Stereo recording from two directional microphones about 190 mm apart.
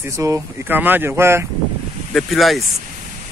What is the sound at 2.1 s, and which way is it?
Speech, centre (ahead or behind).